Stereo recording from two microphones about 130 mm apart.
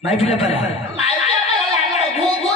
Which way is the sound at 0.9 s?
55° left (ahead or behind).